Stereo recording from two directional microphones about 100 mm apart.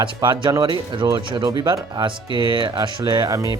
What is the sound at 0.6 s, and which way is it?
Speech, 50° right (ahead or behind).